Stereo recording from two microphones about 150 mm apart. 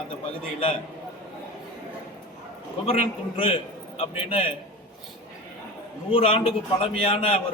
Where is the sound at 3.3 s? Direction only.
40° left (ahead or behind).